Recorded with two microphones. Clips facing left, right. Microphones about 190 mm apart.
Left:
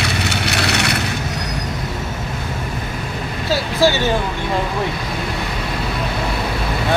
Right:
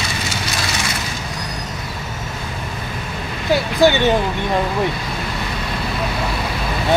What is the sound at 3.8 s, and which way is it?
Speech, 15° right (ahead or behind).